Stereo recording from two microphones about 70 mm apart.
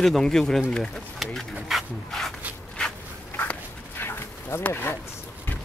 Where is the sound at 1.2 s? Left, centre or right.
Centre.